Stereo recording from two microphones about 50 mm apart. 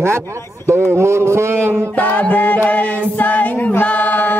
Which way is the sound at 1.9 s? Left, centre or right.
Left.